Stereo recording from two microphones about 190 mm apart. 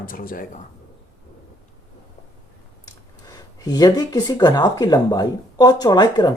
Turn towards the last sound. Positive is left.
turn(degrees=20)  # may be behind; listen again after turning